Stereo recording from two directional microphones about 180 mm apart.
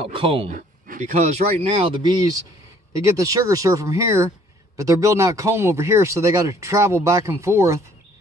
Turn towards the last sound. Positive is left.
turn(degrees=-15)  # may be behind; listen again after turning